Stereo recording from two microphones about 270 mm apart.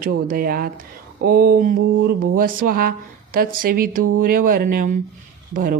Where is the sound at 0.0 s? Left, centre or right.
Right.